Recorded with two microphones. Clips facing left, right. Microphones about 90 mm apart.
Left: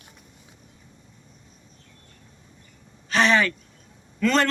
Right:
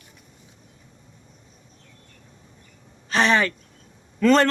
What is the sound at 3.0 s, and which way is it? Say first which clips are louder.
Speech: even; 35° right (ahead or behind).